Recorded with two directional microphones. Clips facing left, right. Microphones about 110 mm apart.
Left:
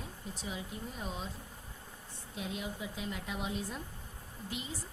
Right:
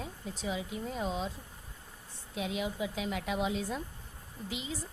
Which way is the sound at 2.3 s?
90° right.